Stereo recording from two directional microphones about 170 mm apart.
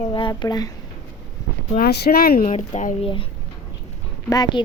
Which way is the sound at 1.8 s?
65° left (ahead or behind).